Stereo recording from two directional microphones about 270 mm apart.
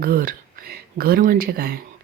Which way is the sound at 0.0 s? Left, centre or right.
Right.